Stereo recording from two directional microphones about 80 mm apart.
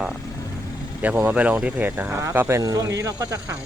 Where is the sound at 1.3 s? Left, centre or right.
Centre.